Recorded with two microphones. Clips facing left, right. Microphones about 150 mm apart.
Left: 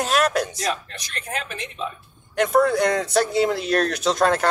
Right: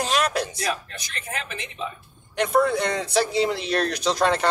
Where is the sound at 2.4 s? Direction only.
Centre (ahead or behind).